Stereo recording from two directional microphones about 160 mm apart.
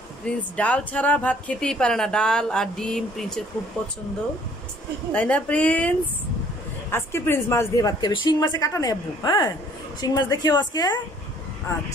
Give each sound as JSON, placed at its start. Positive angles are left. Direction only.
{"t": 0.2, "sound": "speech", "side_deg": 5}
{"t": 5.1, "sound": "a woman's voice", "side_deg": 10}